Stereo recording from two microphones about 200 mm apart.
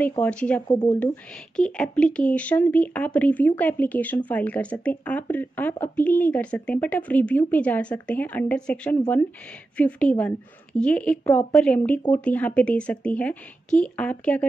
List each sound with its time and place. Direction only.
0.2 s speech: 5° left (ahead or behind)
0.7 s speech: 25° left (ahead or behind)
1.6 s speech: 5° left (ahead or behind)